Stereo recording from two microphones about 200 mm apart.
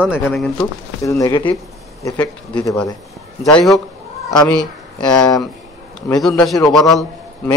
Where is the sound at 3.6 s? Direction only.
Centre (ahead or behind).